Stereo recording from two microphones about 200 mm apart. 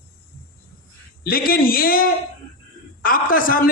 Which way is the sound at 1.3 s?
45° left (ahead or behind).